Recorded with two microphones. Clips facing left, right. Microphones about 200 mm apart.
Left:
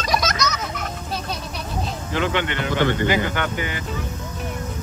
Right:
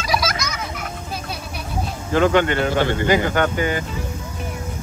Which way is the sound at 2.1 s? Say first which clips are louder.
Right 7 dB; 45° right (ahead or behind).